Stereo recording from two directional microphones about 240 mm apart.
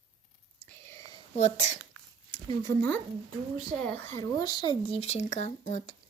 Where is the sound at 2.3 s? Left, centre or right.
Centre.